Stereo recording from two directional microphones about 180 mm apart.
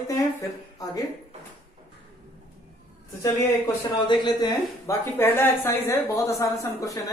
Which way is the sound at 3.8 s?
25° left (ahead or behind).